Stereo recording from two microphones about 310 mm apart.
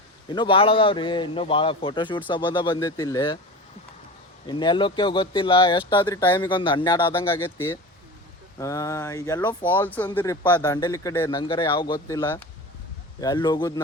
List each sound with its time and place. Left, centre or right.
0.3 s speech: centre
4.4 s speech: centre